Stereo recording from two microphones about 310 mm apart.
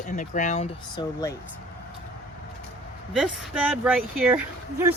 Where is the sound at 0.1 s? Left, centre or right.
Left.